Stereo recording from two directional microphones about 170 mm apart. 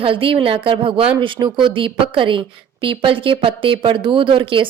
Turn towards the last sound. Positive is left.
turn(degrees=-30)  # may be behind; listen again after turning